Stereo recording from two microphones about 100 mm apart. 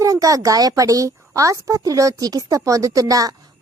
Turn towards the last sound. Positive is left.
turn(degrees=-35)  # may be behind; listen again after turning